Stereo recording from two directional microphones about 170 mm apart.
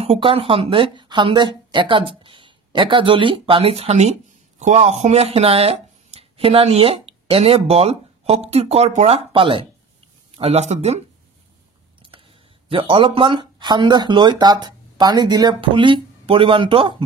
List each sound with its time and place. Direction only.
0.0 s speech: 35° right (ahead or behind)
12.7 s speech: 30° right (ahead or behind)